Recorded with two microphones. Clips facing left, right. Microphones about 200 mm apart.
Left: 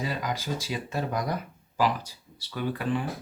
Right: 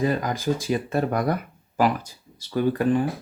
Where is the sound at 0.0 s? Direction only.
50° right (ahead or behind).